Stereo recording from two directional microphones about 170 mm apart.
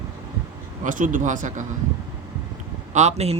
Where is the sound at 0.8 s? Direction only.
50° right (ahead or behind).